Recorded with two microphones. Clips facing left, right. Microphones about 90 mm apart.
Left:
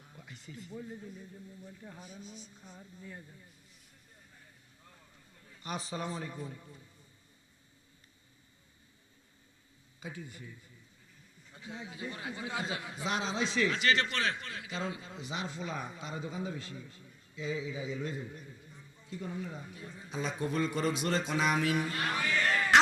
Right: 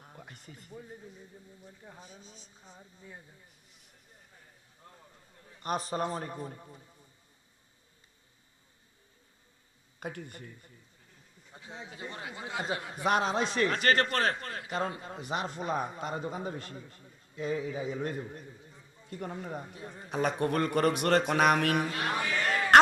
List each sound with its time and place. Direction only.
0.0 s a sound: 45° right (ahead or behind)
0.7 s speech: 5° right (ahead or behind)
2.0 s speech: centre (ahead or behind)
2.6 s speech: 10° right (ahead or behind)
5.6 s speech: 50° right (ahead or behind); by 6.8 s 35° right (ahead or behind)
10.0 s speech: 60° right (ahead or behind)
11.5 s a man's voice: 30° right (ahead or behind); by 19.6 s 55° right (ahead or behind)
19.6 s a man's voice: 35° right (ahead or behind)
19.9 s speech: 60° right (ahead or behind)
22.7 s a sound: 50° right (ahead or behind)